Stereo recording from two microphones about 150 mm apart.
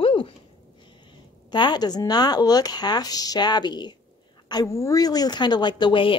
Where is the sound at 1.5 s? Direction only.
30° left (ahead or behind).